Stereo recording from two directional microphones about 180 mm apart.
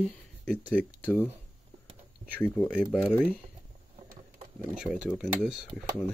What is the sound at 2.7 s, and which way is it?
Speech, 5° right (ahead or behind).